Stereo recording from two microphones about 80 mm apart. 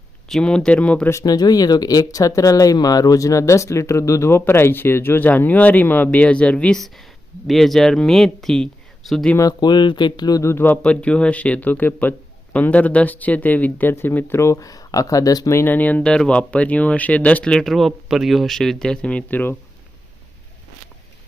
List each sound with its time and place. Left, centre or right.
0.3 s speech: centre
1.2 s speech: left; by 6.7 s centre
6.7 s speech: centre
9.4 s speech: left
10.4 s speech: left
10.8 s speech: centre; by 15.5 s left
15.5 s speech: left